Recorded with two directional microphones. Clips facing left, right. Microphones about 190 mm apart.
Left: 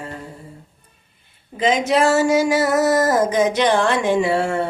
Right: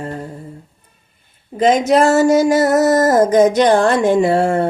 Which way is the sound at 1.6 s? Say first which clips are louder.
Right 5 dB; 45° right (ahead or behind).